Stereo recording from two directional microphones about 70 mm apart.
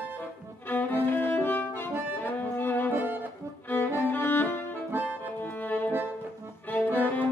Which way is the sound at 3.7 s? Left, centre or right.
Left.